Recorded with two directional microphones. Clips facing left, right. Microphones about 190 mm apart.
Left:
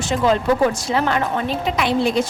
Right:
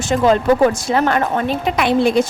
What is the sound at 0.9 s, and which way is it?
A woman's voice, 50° right (ahead or behind).